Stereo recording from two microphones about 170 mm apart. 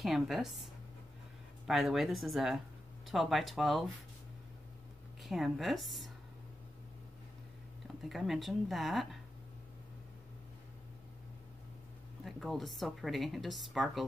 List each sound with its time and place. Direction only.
0.0 s a woman's voice: centre (ahead or behind)
1.7 s a woman's voice: centre (ahead or behind)
5.2 s speech: centre (ahead or behind)
8.0 s a woman's voice: centre (ahead or behind)
12.3 s a woman's voice: centre (ahead or behind)